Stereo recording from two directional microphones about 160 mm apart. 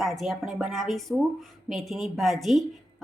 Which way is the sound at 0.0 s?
Centre (ahead or behind).